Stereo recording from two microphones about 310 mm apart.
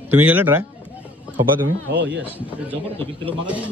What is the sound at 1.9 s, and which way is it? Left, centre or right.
Speech, right.